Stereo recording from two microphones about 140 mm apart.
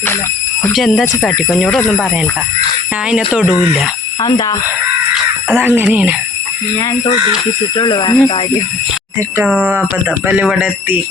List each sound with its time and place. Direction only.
0.8 s speech: centre (ahead or behind)
4.2 s speech: 30° left (ahead or behind)
5.5 s speech: 15° right (ahead or behind)
7.8 s speech: 35° left (ahead or behind)
9.1 s speech: 15° right (ahead or behind)